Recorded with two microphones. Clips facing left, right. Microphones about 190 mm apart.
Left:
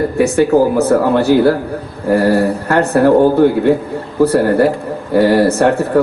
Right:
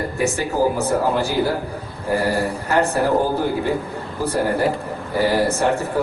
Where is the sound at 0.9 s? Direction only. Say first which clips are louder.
Left 9 dB; 65° left (ahead or behind).